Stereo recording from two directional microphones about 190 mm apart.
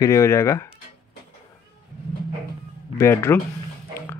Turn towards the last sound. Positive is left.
turn(degrees=15)  # may be behind; listen again after turning